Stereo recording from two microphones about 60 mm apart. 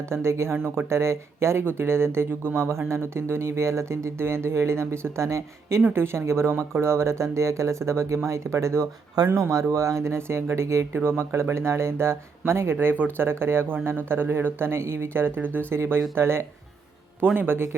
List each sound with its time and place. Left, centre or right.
0.1 s speech: right
5.9 s speech: right
12.8 s speech: right